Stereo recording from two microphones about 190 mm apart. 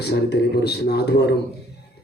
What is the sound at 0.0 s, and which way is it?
A man's voice, 60° left (ahead or behind).